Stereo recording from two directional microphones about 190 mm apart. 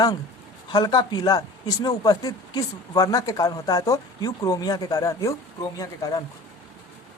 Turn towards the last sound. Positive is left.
turn(degrees=20)  # may be behind; listen again after turning